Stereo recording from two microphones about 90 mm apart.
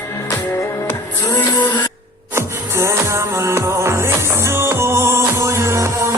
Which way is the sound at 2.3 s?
30° right (ahead or behind).